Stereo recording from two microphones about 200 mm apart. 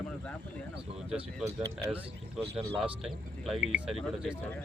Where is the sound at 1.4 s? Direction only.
15° right (ahead or behind).